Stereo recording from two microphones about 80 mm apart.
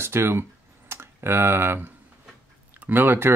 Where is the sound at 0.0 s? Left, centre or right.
Right.